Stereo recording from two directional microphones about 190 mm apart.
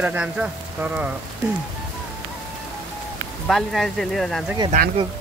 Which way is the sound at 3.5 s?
Centre (ahead or behind).